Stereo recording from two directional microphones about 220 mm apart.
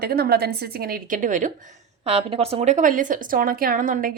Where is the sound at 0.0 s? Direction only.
45° right (ahead or behind).